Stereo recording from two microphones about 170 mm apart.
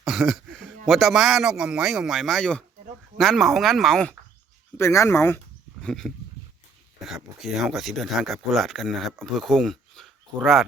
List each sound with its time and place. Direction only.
0.0 s a sound: centre (ahead or behind)
0.9 s speech: centre (ahead or behind)
4.8 s speech: 15° left (ahead or behind)
5.8 s speech: 5° left (ahead or behind)